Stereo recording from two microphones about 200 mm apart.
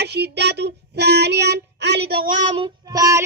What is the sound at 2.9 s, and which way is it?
Child singing, 15° right (ahead or behind).